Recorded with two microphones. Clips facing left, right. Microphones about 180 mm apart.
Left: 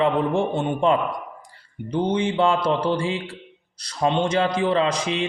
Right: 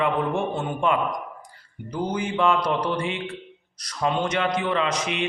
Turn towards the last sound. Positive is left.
turn(degrees=30)  # may be behind; listen again after turning